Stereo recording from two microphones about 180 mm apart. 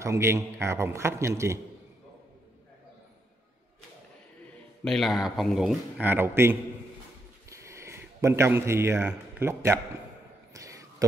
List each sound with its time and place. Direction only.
0.0 s a man's voice: 15° right (ahead or behind)
4.8 s speech: centre (ahead or behind)
7.4 s a sound: 15° right (ahead or behind)